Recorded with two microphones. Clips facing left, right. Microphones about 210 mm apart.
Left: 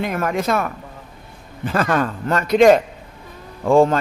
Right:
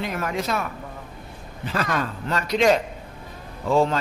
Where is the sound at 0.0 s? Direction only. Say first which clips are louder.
Left 5 dB; 50° left (ahead or behind).